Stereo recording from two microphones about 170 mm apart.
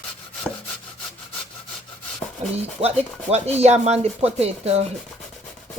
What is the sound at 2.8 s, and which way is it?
Speech, 35° right (ahead or behind).